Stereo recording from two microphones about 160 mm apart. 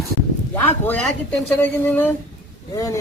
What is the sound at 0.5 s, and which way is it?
Speech, 10° left (ahead or behind).